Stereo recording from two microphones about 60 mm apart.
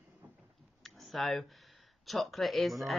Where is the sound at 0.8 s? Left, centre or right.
Centre.